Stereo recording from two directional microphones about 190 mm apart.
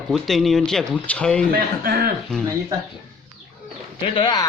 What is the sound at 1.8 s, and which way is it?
Speech, 50° right (ahead or behind).